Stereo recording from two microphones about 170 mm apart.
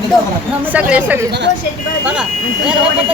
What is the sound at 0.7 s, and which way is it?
Speech, 10° right (ahead or behind).